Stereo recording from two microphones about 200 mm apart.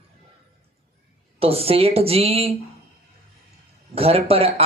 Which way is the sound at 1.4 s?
30° right (ahead or behind).